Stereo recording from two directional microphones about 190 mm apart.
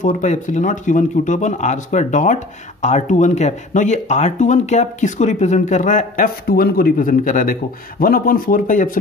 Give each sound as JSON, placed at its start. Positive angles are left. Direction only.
{"t": 0.0, "sound": "speech", "side_deg": 40}